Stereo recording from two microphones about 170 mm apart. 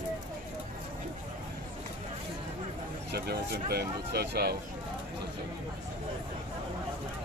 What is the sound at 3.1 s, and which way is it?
Speech, 70° right (ahead or behind).